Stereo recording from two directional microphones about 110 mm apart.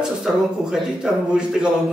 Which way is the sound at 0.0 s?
5° right (ahead or behind).